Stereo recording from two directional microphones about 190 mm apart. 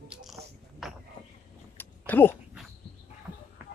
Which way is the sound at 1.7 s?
10° left (ahead or behind).